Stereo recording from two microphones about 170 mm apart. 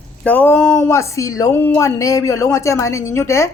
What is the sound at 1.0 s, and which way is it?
A woman's voice, 20° left (ahead or behind).